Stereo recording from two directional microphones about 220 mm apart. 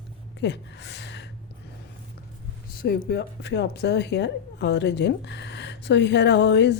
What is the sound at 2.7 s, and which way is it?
A woman's voice, 45° left (ahead or behind).